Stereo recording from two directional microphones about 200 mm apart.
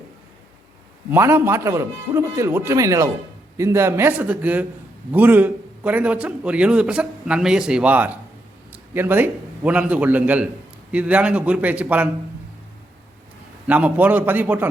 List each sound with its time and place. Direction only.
1.1 s a man's voice: 10° right (ahead or behind)
13.7 s a man's voice: 10° right (ahead or behind)